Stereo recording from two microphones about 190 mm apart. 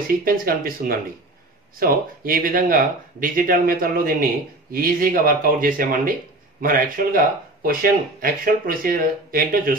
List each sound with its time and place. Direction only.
0.1 s speech: 50° right (ahead or behind)